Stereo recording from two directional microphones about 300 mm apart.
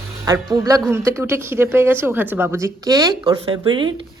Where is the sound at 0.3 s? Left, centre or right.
Centre.